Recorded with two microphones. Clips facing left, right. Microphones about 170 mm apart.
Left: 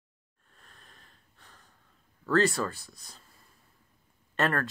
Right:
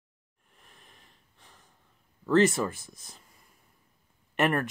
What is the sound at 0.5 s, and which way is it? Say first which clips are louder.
Sniff: even; 15° right (ahead or behind).